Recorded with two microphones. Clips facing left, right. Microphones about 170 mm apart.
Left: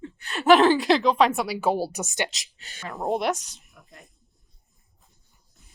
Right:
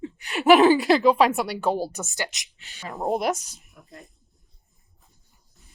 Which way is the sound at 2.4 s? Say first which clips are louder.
Left 1 dB; 40° left (ahead or behind).